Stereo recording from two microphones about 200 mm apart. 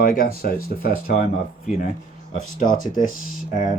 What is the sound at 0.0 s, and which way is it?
Speech, 45° left (ahead or behind).